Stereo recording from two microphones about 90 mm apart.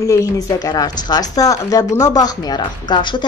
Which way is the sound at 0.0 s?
35° left (ahead or behind).